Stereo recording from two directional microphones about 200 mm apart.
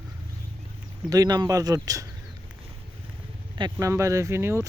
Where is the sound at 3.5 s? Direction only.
20° right (ahead or behind).